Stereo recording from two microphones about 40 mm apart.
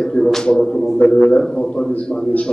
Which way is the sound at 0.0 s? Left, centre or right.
Centre.